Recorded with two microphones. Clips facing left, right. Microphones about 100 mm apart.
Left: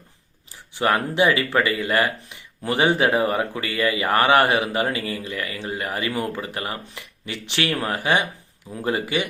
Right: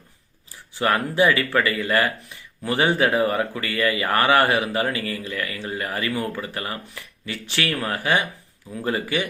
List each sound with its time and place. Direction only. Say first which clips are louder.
0.7 s speech: left 1 dB; 20° left (ahead or behind)